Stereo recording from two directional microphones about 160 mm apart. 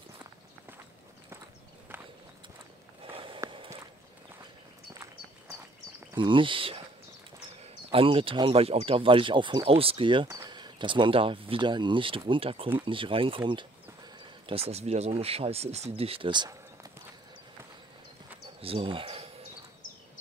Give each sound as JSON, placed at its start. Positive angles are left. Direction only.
{"t": 3.0, "sound": "a sound", "side_deg": -35}
{"t": 3.4, "sound": "walk", "side_deg": -35}
{"t": 6.1, "sound": "speech", "side_deg": -30}
{"t": 7.9, "sound": "speech", "side_deg": -35}
{"t": 18.6, "sound": "bird", "side_deg": -35}